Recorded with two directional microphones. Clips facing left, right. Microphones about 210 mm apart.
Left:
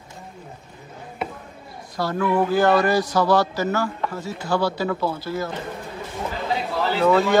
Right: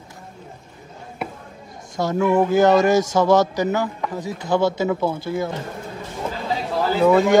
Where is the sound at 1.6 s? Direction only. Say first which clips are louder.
Even; 45° right (ahead or behind).